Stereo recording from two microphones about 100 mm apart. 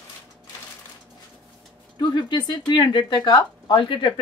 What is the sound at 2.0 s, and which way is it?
Speech, 50° left (ahead or behind).